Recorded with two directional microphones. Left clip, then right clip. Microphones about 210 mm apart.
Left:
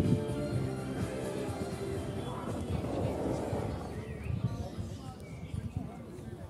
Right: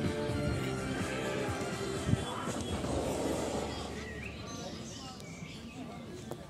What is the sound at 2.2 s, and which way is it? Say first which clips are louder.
Music: right 2 dB; 10° right (ahead or behind).